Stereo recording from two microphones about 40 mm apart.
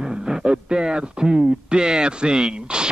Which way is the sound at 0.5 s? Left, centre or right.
Centre.